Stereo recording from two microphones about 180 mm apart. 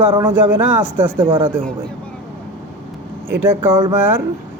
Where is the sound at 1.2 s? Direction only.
30° right (ahead or behind).